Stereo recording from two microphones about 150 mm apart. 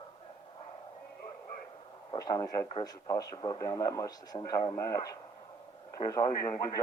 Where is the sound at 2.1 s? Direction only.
25° left (ahead or behind).